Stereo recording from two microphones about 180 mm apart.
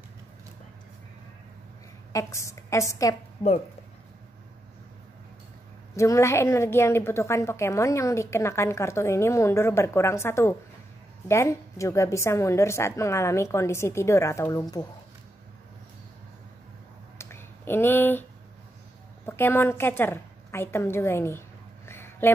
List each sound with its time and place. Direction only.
2.1 s a woman's voice: 15° left (ahead or behind)
5.9 s a woman's voice: 15° left (ahead or behind)
17.2 s a sound: 15° left (ahead or behind)
19.2 s a woman's voice: 15° left (ahead or behind)